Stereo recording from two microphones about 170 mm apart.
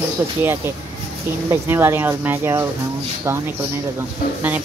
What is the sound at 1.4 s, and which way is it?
Speech, 15° right (ahead or behind).